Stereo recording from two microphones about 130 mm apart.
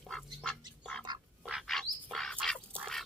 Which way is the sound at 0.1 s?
5° left (ahead or behind).